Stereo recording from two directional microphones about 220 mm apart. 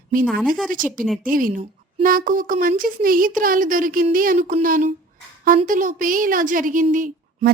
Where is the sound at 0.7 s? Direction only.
40° right (ahead or behind).